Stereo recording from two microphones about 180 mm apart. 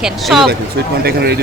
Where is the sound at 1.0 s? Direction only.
65° right (ahead or behind).